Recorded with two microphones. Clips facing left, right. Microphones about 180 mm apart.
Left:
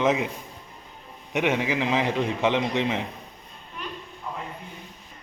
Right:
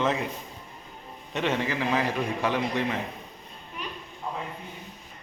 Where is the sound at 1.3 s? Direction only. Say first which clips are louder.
Left 3 dB; 15° left (ahead or behind).